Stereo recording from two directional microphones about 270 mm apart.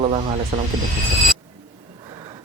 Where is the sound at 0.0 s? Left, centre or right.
Right.